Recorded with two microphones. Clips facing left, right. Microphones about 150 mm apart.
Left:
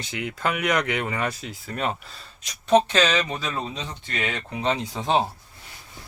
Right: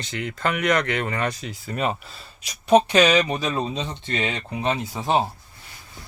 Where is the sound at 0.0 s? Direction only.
10° left (ahead or behind); by 4.4 s 20° right (ahead or behind).